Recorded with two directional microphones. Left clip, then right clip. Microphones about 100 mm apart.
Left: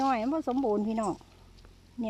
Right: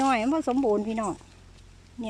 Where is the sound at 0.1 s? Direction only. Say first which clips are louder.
Right 4 dB; 15° left (ahead or behind).